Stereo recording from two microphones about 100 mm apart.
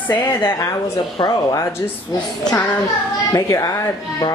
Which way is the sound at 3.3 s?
35° left (ahead or behind).